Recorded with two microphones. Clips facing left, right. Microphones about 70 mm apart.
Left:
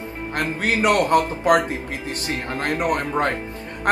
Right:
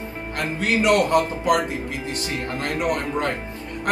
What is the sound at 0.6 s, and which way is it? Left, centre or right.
Speech, left.